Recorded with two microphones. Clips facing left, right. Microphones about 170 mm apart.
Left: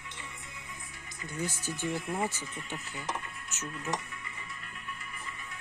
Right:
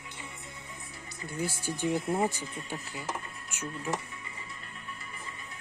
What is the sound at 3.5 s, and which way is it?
Dishes, 10° right (ahead or behind).